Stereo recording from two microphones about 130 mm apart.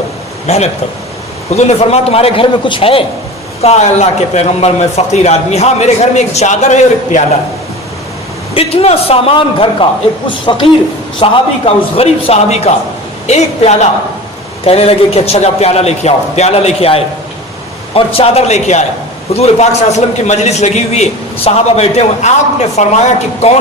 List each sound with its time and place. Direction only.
0.5 s a man's voice: 60° left (ahead or behind)
3.6 s a man's voice: 55° left (ahead or behind)
8.5 s a man's voice: 50° left (ahead or behind)
11.1 s a man's voice: 50° left (ahead or behind)
14.6 s a man's voice: 50° left (ahead or behind)